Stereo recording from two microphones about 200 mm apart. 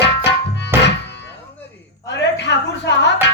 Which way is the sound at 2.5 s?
60° left (ahead or behind).